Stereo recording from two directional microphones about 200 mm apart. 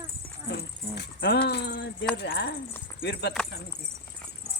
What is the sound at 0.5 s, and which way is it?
Speech, 60° left (ahead or behind).